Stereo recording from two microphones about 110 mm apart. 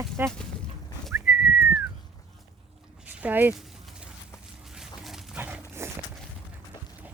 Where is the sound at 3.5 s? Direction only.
Centre (ahead or behind).